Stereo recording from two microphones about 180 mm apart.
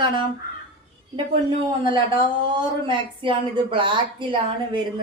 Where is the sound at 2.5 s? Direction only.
25° right (ahead or behind).